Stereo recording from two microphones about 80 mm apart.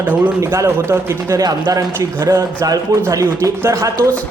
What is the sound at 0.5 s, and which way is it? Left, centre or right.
A man's voice, right.